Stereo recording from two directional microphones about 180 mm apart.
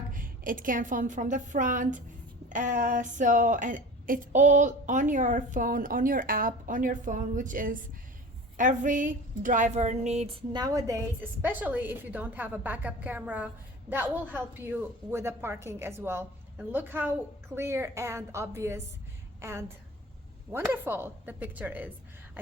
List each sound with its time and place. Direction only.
0.1 s a woman's voice: 50° right (ahead or behind)
10.5 s a woman's voice: 20° right (ahead or behind)